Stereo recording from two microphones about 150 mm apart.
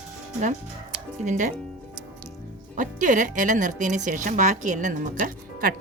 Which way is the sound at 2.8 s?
55° right (ahead or behind).